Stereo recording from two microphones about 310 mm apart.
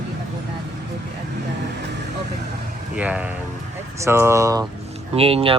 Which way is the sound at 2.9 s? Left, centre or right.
Centre.